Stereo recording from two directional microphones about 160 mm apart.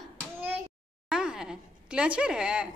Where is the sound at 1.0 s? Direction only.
5° right (ahead or behind).